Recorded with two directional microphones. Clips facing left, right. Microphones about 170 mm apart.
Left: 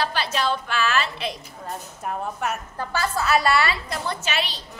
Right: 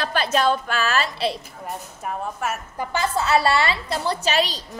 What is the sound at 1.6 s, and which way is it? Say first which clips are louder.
Speech: even; centre (ahead or behind).